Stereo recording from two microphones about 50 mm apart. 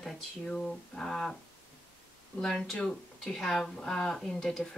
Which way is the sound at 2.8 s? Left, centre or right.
Centre.